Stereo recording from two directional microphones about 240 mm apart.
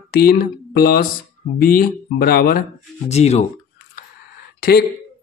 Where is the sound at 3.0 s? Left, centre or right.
Left.